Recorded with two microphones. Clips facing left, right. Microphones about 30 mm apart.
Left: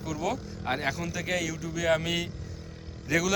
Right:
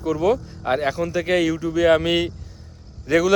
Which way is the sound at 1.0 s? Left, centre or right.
Right.